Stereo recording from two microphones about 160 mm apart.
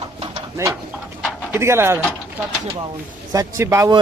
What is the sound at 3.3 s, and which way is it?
Speech, 20° right (ahead or behind).